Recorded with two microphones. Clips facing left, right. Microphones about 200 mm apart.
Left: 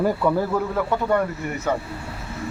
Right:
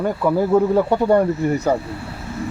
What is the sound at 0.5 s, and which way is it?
Speech, 30° right (ahead or behind).